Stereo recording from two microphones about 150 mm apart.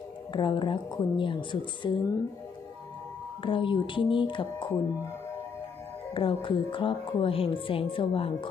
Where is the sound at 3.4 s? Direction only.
35° left (ahead or behind).